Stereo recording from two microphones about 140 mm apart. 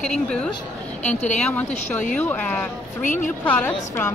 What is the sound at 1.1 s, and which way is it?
Speech, 55° left (ahead or behind).